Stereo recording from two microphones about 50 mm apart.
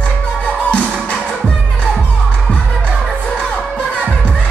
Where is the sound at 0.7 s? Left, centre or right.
Left.